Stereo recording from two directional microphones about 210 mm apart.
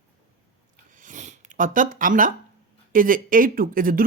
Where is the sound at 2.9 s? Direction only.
40° right (ahead or behind).